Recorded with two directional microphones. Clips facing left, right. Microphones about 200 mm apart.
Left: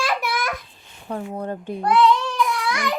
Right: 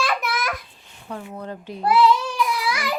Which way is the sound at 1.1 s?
35° left (ahead or behind).